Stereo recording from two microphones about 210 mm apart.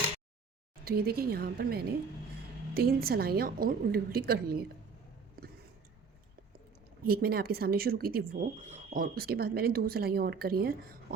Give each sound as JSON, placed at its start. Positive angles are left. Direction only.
{"t": 0.9, "sound": "speech", "side_deg": -45}
{"t": 7.0, "sound": "speech", "side_deg": -45}